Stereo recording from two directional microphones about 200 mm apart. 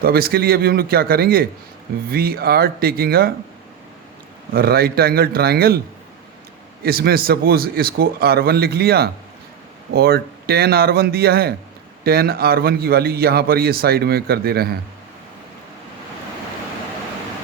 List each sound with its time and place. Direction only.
0.0 s a man's voice: 50° right (ahead or behind)
4.5 s a man's voice: 50° right (ahead or behind)
6.8 s a man's voice: 50° right (ahead or behind)